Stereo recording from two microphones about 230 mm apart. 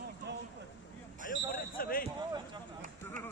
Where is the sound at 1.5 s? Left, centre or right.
Left.